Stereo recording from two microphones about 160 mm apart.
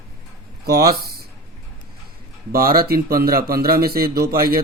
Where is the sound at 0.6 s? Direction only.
75° right (ahead or behind).